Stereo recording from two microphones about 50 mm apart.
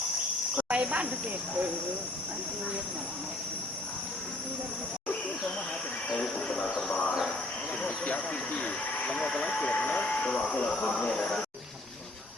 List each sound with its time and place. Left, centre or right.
0.7 s speech: right
6.7 s a sound: left
7.8 s vehicle: left
9.1 s speech: centre
9.6 s speech: left
10.8 s speech: left
11.0 s speech: centre